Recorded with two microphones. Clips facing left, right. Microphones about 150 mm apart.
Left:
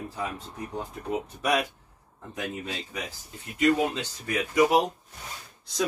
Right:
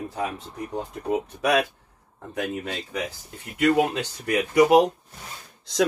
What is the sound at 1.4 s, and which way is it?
Speech, 65° right (ahead or behind).